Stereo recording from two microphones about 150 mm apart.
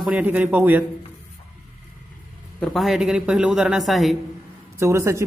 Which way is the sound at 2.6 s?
Centre (ahead or behind).